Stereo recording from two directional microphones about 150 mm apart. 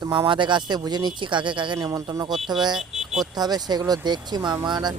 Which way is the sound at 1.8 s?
20° right (ahead or behind).